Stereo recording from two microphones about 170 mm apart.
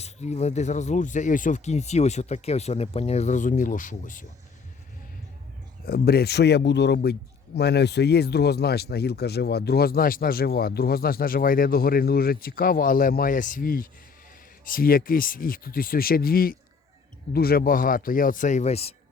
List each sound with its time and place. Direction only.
0.0 s speech: 40° left (ahead or behind)
5.8 s a man's voice: 65° left (ahead or behind); by 18.9 s 40° left (ahead or behind)